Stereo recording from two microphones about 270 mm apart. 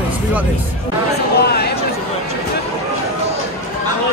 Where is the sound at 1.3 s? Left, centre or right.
Left.